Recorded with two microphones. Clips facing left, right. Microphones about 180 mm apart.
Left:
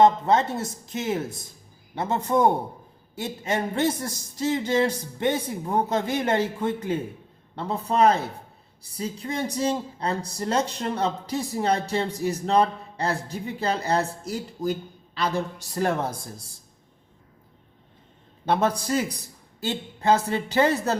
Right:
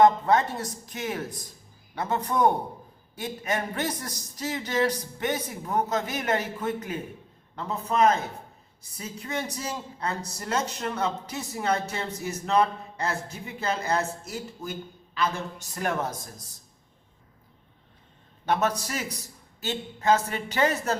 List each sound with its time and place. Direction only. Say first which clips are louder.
0.0 s speech: left 1 dB; 25° left (ahead or behind)
18.4 s speech: left 3 dB; 30° left (ahead or behind)